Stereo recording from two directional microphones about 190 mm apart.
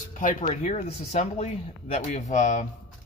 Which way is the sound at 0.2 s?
45° left (ahead or behind).